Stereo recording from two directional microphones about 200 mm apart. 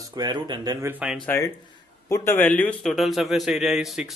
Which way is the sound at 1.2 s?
10° left (ahead or behind).